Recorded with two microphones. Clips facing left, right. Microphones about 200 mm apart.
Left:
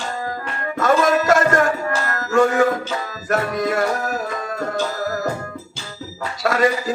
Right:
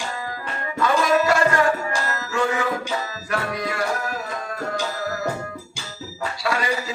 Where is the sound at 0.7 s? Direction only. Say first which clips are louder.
Left 3 dB; 45° left (ahead or behind).